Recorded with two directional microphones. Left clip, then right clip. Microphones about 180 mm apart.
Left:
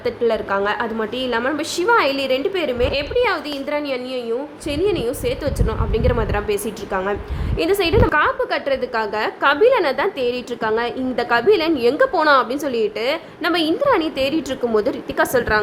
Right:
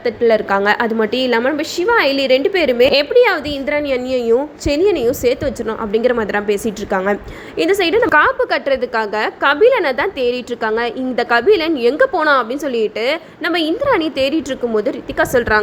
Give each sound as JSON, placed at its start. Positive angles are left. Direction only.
{"t": 0.0, "sound": "a woman's voice", "side_deg": -15}
{"t": 3.2, "sound": "a woman's voice", "side_deg": -15}
{"t": 3.9, "sound": "a woman's voice", "side_deg": -35}
{"t": 5.5, "sound": "a woman's voice", "side_deg": -20}
{"t": 8.1, "sound": "a woman's voice", "side_deg": -30}
{"t": 14.6, "sound": "a woman's voice", "side_deg": -10}